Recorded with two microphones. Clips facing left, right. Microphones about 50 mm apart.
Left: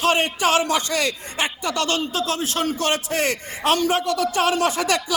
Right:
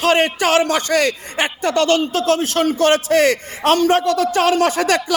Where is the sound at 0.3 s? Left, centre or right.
Right.